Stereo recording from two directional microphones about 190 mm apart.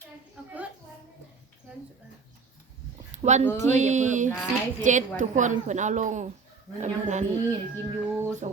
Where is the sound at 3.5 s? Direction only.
40° right (ahead or behind).